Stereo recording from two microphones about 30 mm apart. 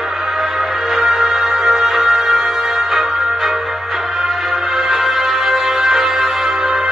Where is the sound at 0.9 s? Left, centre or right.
Centre.